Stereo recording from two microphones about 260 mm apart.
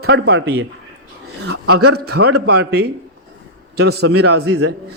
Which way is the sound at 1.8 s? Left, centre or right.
Right.